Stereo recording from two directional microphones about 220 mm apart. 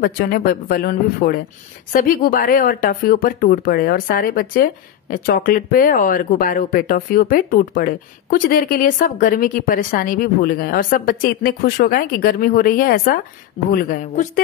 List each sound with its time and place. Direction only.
0.0 s speech: 40° left (ahead or behind)